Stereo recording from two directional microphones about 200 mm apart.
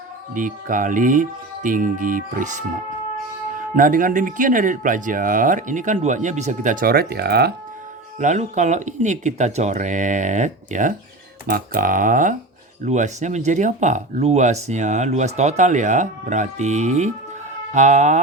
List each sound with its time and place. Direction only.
0.3 s speech: 40° right (ahead or behind)
3.8 s speech: 40° right (ahead or behind)
8.2 s speech: 35° right (ahead or behind)